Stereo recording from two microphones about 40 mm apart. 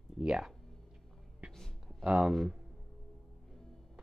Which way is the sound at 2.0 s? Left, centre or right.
Right.